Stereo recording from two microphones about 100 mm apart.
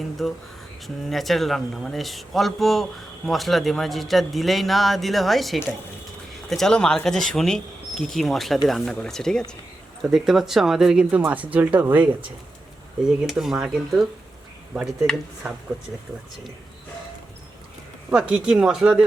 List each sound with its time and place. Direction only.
0.2 s speech: centre (ahead or behind); by 12.1 s 15° right (ahead or behind)
13.1 s speech: 5° right (ahead or behind)
18.1 s speech: 10° right (ahead or behind)